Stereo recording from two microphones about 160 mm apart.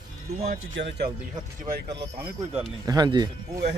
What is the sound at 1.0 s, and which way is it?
Speech, 35° right (ahead or behind).